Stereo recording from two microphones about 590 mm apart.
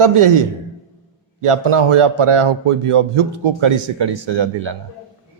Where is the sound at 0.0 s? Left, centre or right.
Right.